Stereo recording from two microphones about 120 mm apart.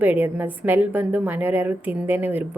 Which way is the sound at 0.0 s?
15° right (ahead or behind).